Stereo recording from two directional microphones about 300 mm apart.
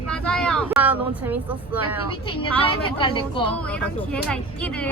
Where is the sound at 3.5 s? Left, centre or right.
Centre.